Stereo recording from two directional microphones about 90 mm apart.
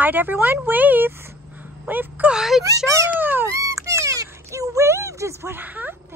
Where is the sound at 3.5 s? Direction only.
35° right (ahead or behind).